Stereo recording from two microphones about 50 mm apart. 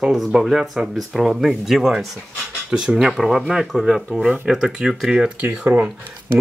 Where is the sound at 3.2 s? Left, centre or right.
Centre.